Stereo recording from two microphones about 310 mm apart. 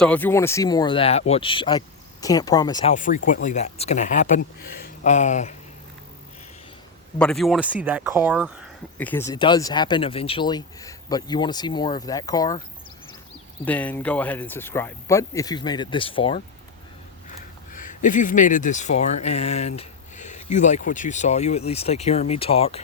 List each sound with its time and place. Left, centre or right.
0.0 s speech: centre; by 5.5 s left
7.2 s speech: centre
13.7 s speech: centre
17.7 s speech: left